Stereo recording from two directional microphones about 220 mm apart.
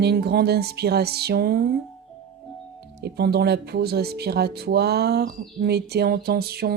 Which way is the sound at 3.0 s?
45° right (ahead or behind).